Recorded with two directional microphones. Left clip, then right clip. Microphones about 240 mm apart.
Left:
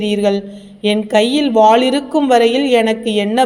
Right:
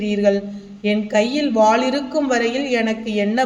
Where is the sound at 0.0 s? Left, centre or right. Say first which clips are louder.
Left 2 dB; left.